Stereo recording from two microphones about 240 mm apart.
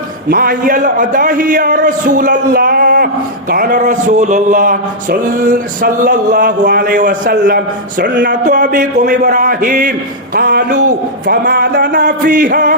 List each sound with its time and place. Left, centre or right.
0.3 s mantra: right
8.4 s mantra: right